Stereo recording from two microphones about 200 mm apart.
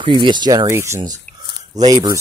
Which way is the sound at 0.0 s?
25° right (ahead or behind).